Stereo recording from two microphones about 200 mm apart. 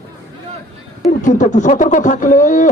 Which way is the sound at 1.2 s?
40° left (ahead or behind).